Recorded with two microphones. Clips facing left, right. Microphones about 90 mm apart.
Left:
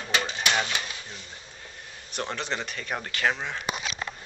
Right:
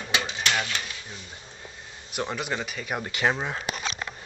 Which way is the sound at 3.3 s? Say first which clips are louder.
Right 1 dB; 35° right (ahead or behind).